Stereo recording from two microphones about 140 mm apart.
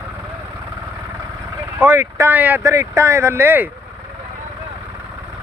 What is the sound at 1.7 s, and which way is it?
Speech, 15° right (ahead or behind).